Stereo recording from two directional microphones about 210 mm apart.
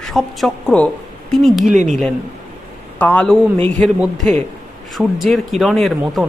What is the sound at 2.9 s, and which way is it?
A man's voice, 5° left (ahead or behind).